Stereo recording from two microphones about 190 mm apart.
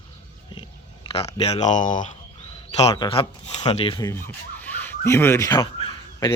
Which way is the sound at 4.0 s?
10° left (ahead or behind).